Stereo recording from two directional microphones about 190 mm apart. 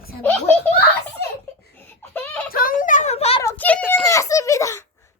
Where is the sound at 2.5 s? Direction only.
50° left (ahead or behind).